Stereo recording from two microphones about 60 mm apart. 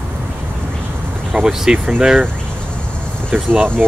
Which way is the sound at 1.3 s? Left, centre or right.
Centre.